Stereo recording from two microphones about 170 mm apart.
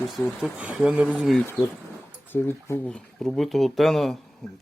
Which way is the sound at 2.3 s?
10° left (ahead or behind).